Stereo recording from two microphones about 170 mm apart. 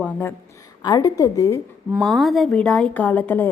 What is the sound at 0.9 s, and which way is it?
Speech, 20° left (ahead or behind).